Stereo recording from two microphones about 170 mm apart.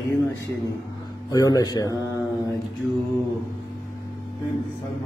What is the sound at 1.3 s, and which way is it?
Speech, 20° left (ahead or behind).